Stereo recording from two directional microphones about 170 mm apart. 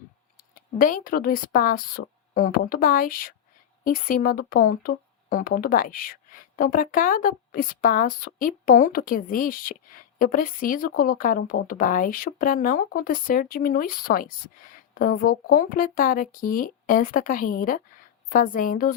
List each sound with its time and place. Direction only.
0.5 s speech: 55° left (ahead or behind)